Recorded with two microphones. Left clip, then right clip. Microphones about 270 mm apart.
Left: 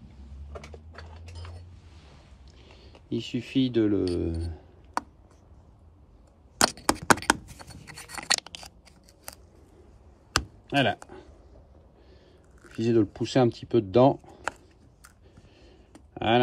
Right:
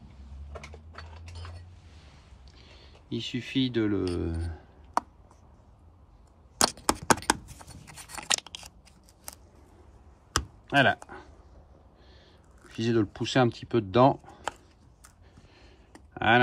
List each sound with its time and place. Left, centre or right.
0.9 s clip-clop: centre
2.6 s speech: centre
6.6 s a sound: centre
10.7 s a sound: centre
12.6 s speech: centre
16.1 s typing: centre